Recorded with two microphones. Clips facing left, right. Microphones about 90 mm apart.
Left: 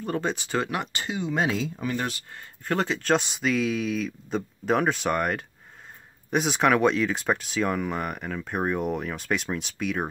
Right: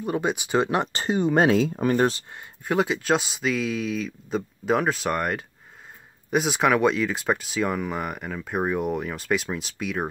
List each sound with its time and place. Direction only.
0.0 s speech: 15° right (ahead or behind)
0.7 s speech: 30° right (ahead or behind); by 2.0 s 50° right (ahead or behind)
2.3 s speech: 10° right (ahead or behind)